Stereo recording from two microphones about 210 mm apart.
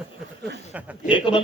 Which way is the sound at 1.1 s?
25° left (ahead or behind).